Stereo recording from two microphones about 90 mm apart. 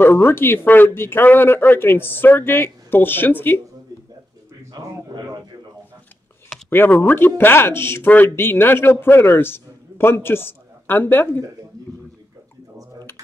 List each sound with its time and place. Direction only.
0.0 s speech: 25° left (ahead or behind)
3.9 s a sound: 45° right (ahead or behind)
6.7 s speech: 25° left (ahead or behind)